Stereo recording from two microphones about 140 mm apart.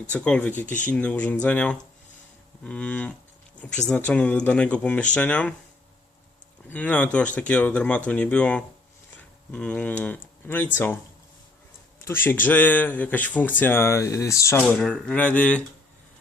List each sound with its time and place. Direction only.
0.1 s speech: 10° left (ahead or behind)
6.7 s speech: 10° left (ahead or behind)
12.0 s speech: 15° left (ahead or behind)
14.8 s speech: 5° left (ahead or behind)